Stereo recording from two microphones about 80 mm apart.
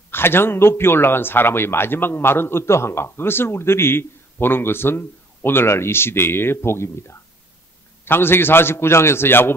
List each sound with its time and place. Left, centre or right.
0.1 s a man's voice: left